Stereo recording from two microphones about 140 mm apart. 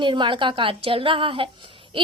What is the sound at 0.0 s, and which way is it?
A woman's voice, 35° right (ahead or behind).